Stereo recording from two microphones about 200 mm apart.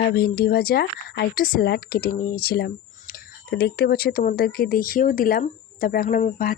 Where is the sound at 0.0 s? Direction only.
50° left (ahead or behind).